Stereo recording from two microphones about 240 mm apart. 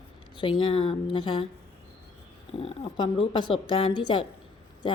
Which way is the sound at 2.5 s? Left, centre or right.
Left.